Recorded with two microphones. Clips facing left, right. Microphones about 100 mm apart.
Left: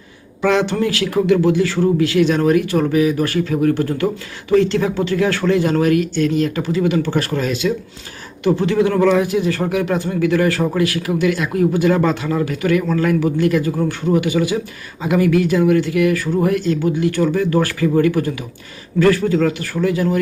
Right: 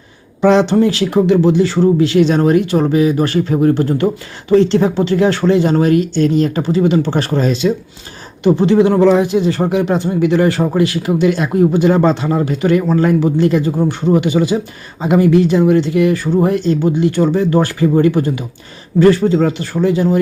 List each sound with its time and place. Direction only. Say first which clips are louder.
0.4 s speech: right 6 dB; 25° right (ahead or behind)